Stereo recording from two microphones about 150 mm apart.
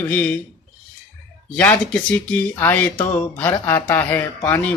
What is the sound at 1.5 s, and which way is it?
Speech, 10° left (ahead or behind).